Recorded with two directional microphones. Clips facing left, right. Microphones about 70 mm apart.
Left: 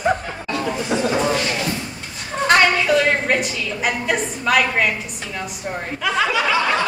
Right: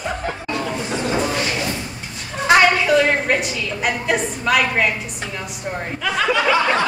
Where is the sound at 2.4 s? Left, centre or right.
Centre.